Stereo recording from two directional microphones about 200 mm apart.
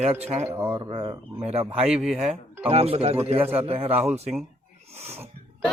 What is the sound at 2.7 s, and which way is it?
A man's voice, 30° right (ahead or behind).